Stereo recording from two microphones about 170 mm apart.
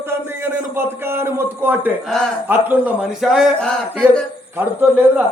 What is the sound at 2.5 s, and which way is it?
Speech, 10° right (ahead or behind).